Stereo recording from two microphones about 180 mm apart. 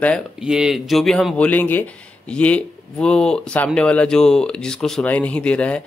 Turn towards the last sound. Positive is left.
turn(degrees=5)  # may be behind; listen again after turning